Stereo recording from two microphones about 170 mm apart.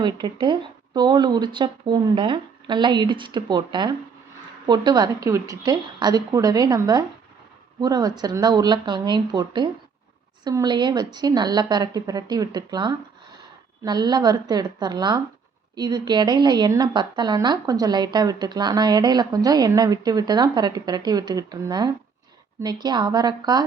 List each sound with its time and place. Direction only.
0.0 s a woman's voice: 25° right (ahead or behind)